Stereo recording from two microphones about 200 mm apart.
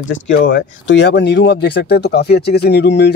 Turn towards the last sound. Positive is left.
turn(degrees=55)  # may be behind; listen again after turning